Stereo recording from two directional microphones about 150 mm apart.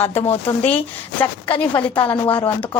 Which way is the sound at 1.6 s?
10° left (ahead or behind).